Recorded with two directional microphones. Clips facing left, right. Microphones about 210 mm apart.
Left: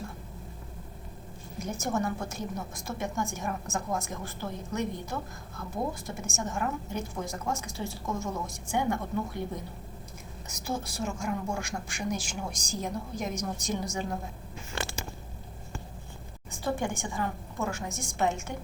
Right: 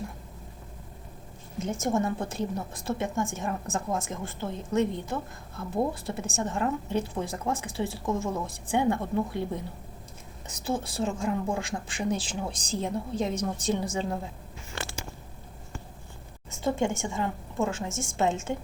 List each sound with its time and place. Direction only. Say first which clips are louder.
1.8 s a woman's voice: right 3 dB; 25° right (ahead or behind)
10.7 s speech: right 4 dB; 30° right (ahead or behind)
16.5 s speech: right 4 dB; 25° right (ahead or behind)